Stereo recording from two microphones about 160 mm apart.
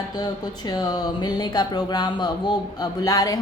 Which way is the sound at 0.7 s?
25° left (ahead or behind).